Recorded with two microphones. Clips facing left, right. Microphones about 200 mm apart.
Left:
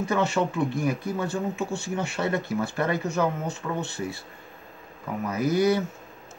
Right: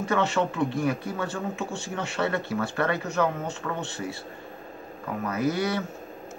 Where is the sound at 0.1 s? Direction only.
10° left (ahead or behind).